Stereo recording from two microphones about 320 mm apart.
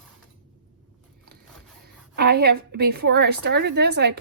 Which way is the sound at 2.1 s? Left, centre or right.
Right.